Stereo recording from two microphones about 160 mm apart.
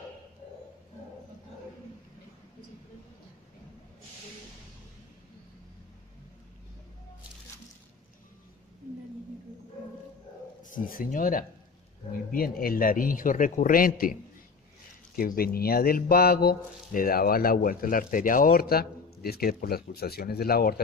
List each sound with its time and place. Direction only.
10.6 s a man's voice: 60° left (ahead or behind)
15.1 s speech: 65° left (ahead or behind)